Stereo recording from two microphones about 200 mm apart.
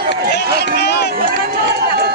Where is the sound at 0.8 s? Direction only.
55° left (ahead or behind).